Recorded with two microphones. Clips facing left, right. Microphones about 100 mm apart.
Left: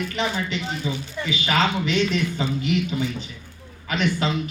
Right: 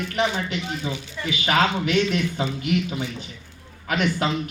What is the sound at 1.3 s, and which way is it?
A man's voice, 55° right (ahead or behind).